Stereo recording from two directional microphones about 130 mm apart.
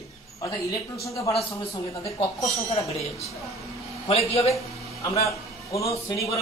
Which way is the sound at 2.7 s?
50° left (ahead or behind).